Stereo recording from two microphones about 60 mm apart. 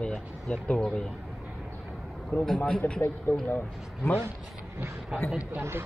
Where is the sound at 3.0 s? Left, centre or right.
Left.